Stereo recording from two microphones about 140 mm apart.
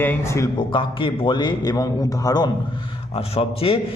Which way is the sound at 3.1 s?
45° left (ahead or behind).